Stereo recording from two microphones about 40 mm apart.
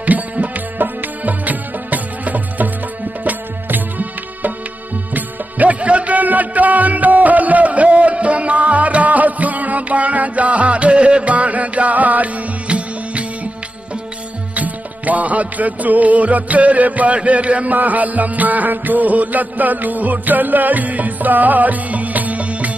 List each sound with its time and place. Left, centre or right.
0.0 s music: right
14.5 s music: right
17.2 s a sound: right
17.7 s music: right